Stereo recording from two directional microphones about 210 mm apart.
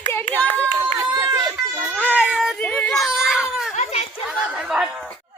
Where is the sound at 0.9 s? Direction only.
20° right (ahead or behind).